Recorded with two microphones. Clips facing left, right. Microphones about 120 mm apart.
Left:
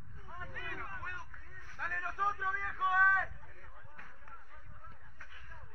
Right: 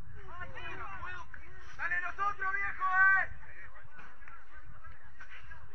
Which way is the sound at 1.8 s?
10° left (ahead or behind).